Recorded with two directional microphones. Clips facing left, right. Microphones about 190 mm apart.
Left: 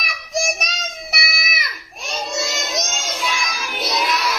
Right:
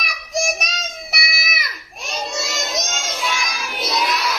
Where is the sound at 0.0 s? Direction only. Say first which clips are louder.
Even; centre (ahead or behind).